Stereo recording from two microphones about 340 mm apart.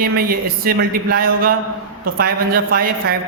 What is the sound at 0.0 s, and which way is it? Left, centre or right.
A man's voice, right.